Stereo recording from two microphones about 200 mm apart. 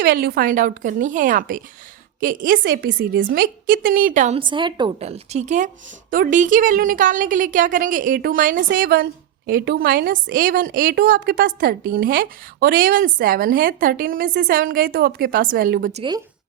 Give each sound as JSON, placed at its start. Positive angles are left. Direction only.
{"t": 0.0, "sound": "a woman's voice", "side_deg": -50}
{"t": 3.3, "sound": "a woman's voice", "side_deg": -45}
{"t": 4.4, "sound": "a woman's voice", "side_deg": -25}